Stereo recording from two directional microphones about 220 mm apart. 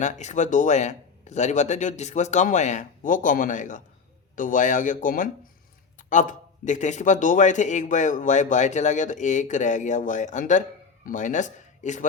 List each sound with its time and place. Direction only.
0.0 s speech: 30° left (ahead or behind)